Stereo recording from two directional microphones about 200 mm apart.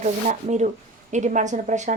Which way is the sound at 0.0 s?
35° right (ahead or behind).